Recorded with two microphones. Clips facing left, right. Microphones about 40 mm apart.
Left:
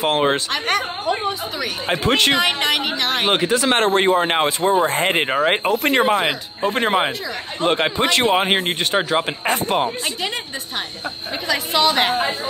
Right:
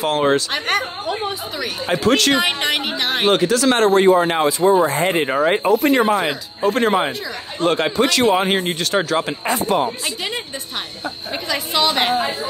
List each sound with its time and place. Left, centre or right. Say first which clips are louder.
0.0 s a man's voice: right 1 dB; left
0.5 s speech: even; centre
1.9 s a man's voice: right 1 dB; left
2.3 s speech: even; centre
3.3 s speech: right 3 dB; left
6.1 s a man's voice: even; left
8.9 s speech: right 1 dB; centre
9.5 s speech: right 1 dB; left
11.4 s speech: left 1 dB; centre